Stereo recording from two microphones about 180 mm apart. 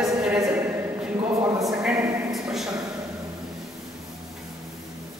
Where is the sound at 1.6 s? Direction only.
Centre (ahead or behind).